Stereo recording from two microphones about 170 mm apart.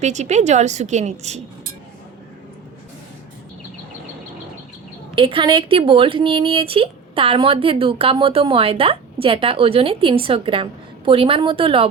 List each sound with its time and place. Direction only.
0.0 s a woman's voice: 45° right (ahead or behind)
5.1 s speech: 30° right (ahead or behind)